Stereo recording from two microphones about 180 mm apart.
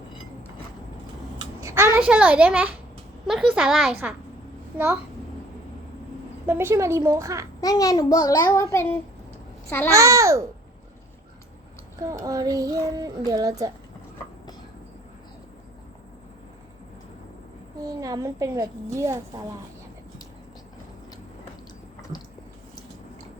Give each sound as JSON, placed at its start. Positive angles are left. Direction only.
{"t": 1.6, "sound": "a sound", "side_deg": -15}
{"t": 2.0, "sound": "a child's voice", "side_deg": -5}
{"t": 6.4, "sound": "a child's voice", "side_deg": -10}
{"t": 7.6, "sound": "a child's voice", "side_deg": 20}
{"t": 8.7, "sound": "child singing", "side_deg": 15}
{"t": 9.9, "sound": "a child's voice", "side_deg": -15}
{"t": 11.9, "sound": "speech", "side_deg": -15}
{"t": 17.8, "sound": "a child's voice", "side_deg": -20}